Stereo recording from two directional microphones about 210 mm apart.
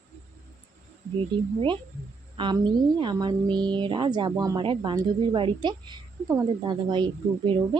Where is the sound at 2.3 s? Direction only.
20° right (ahead or behind).